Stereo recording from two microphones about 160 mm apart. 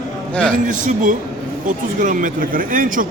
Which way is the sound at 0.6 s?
55° right (ahead or behind).